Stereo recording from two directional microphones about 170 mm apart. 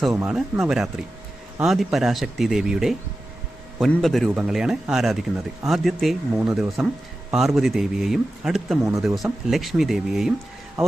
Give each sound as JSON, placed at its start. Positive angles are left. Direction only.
{"t": 0.1, "sound": "speech", "side_deg": -15}
{"t": 0.6, "sound": "speech", "side_deg": -5}
{"t": 8.8, "sound": "speech", "side_deg": -20}
{"t": 9.0, "sound": "speech", "side_deg": 0}